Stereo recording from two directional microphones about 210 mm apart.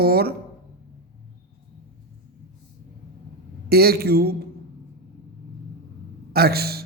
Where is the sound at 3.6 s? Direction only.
45° right (ahead or behind).